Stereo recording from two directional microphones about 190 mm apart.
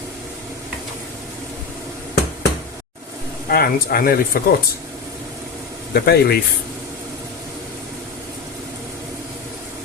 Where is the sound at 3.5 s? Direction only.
50° left (ahead or behind).